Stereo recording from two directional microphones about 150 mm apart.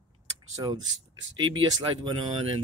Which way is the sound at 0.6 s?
25° right (ahead or behind).